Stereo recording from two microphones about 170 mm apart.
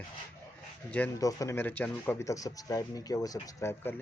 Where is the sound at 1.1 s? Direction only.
20° left (ahead or behind).